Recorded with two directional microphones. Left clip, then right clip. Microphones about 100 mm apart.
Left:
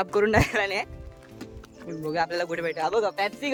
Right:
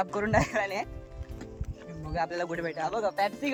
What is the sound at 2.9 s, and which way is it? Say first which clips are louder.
Speech: left 5 dB; 10° left (ahead or behind).